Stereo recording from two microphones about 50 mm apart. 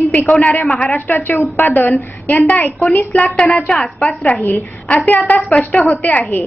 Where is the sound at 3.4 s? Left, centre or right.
Left.